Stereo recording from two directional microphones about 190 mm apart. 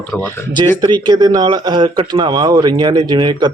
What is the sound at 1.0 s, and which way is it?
Speech, 20° right (ahead or behind).